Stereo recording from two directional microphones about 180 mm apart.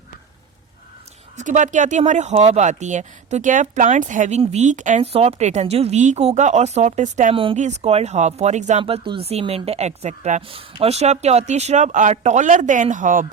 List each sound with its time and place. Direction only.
1.4 s speech: 45° right (ahead or behind)
7.3 s speech: 30° right (ahead or behind)
8.8 s speech: 30° right (ahead or behind); by 13.2 s 45° right (ahead or behind)